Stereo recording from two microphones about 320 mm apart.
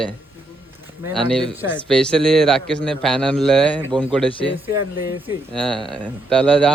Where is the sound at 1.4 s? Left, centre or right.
Centre.